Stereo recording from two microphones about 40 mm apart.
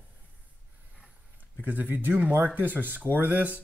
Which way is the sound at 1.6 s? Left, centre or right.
Right.